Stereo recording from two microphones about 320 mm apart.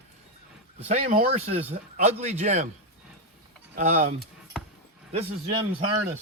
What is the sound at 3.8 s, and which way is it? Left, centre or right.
Speech, right.